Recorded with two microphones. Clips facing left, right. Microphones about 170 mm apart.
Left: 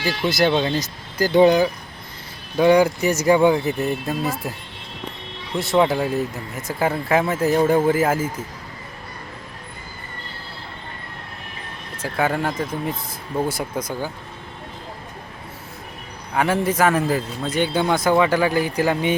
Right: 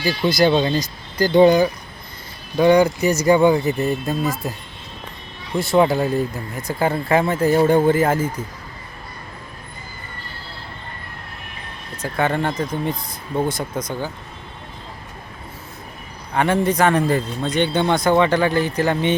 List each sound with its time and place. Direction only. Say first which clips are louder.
0.2 s speech: right 3 dB; centre (ahead or behind)
5.5 s speech: right 2 dB; centre (ahead or behind)
12.0 s speech: right 1 dB; 5° left (ahead or behind)
16.3 s speech: right 2 dB; 5° left (ahead or behind)